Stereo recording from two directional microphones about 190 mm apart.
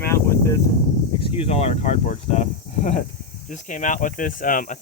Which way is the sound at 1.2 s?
30° left (ahead or behind).